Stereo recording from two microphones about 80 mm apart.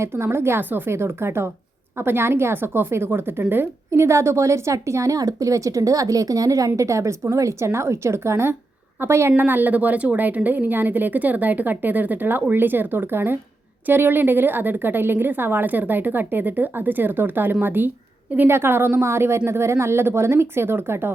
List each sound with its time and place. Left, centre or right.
0.0 s a woman's voice: right